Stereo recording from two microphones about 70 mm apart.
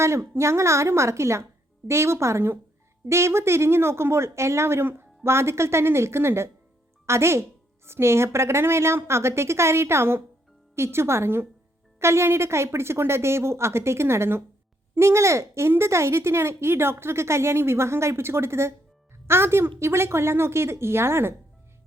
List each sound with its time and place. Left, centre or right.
0.0 s speech: right